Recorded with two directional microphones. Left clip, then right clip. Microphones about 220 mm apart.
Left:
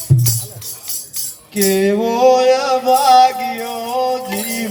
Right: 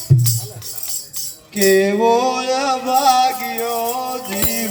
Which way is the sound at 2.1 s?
50° left (ahead or behind).